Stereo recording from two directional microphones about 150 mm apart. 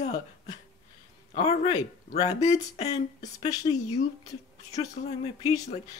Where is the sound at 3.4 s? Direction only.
25° left (ahead or behind).